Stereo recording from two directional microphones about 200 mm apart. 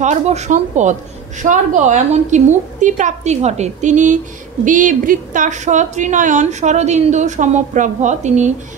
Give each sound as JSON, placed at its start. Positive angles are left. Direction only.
{"t": 0.0, "sound": "a woman's voice", "side_deg": -35}